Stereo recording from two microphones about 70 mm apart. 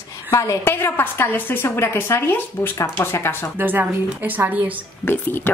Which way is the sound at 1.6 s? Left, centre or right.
Left.